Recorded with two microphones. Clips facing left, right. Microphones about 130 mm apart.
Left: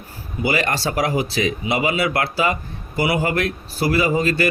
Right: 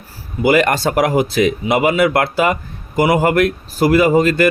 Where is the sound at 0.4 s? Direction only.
50° right (ahead or behind).